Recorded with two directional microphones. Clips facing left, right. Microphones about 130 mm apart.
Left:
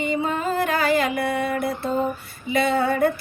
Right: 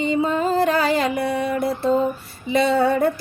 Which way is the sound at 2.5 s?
30° right (ahead or behind).